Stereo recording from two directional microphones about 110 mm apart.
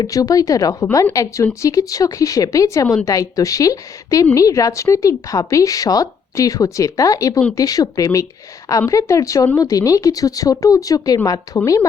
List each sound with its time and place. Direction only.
0.0 s speech: 35° left (ahead or behind)